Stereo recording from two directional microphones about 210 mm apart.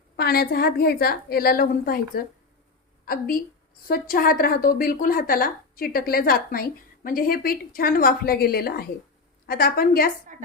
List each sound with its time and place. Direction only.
0.2 s a woman's voice: 45° left (ahead or behind)